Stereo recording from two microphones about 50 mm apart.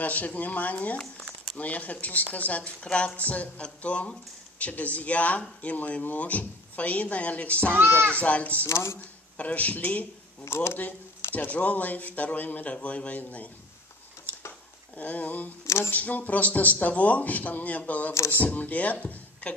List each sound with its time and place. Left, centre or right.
0.0 s a woman's voice: left
8.6 s speech: left
9.4 s speech: left
10.4 s speech: left
10.7 s speech: left
15.0 s speech: left
15.6 s speech: left
15.9 s speech: left